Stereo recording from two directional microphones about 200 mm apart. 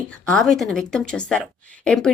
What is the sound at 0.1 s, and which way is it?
A woman's voice, centre (ahead or behind).